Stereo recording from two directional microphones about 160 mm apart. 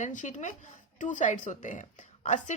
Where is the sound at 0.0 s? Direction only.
50° left (ahead or behind).